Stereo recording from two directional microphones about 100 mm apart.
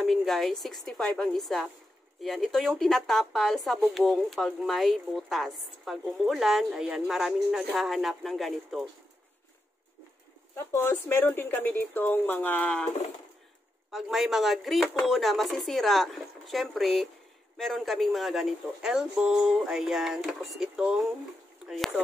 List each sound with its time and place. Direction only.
0.0 s speech: centre (ahead or behind)
10.5 s speech: 30° left (ahead or behind)
13.9 s speech: centre (ahead or behind)